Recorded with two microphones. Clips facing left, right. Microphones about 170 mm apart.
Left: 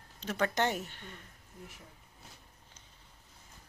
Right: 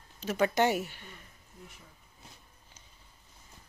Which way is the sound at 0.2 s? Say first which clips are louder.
Right 4 dB; 5° right (ahead or behind).